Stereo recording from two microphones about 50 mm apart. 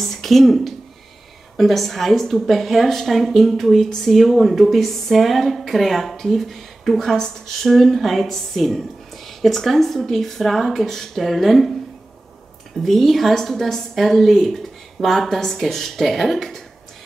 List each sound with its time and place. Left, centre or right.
0.0 s a sound: centre
1.6 s a woman's voice: centre
12.7 s a woman's voice: centre